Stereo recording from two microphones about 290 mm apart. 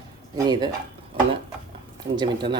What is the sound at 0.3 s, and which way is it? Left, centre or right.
Speech, centre.